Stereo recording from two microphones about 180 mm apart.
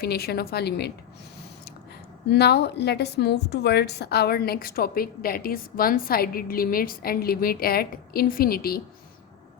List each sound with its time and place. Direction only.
0.0 s a woman's voice: 60° left (ahead or behind)
2.3 s a woman's voice: 65° left (ahead or behind)